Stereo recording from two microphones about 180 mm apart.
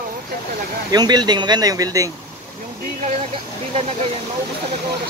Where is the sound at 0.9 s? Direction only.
20° right (ahead or behind).